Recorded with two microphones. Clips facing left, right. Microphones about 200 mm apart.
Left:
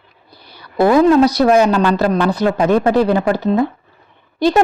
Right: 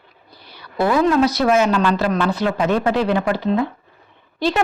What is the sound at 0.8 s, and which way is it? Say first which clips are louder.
A woman's voice: left 6 dB; 40° left (ahead or behind).